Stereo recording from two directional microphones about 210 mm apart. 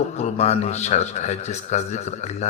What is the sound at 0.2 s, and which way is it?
Speech, 30° left (ahead or behind).